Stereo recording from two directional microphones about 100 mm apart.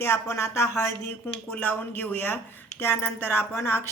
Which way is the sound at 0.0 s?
30° left (ahead or behind).